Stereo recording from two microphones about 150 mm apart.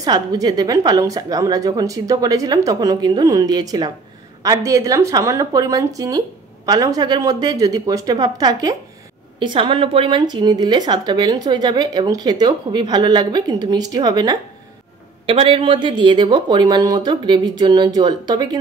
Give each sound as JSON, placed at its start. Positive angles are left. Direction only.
{"t": 0.0, "sound": "speech", "side_deg": -25}
{"t": 15.2, "sound": "speech", "side_deg": -40}